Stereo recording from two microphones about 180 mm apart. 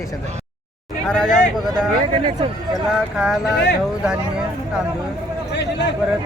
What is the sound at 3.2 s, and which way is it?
Speech, 5° right (ahead or behind).